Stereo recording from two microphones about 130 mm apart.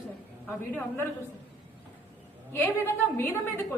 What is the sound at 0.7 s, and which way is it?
Speech, 15° left (ahead or behind).